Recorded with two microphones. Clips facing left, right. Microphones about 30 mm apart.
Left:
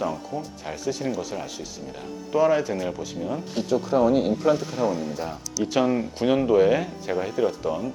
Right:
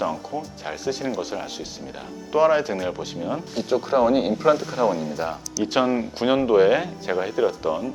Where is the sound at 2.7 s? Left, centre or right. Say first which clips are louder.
Right 2 dB; centre.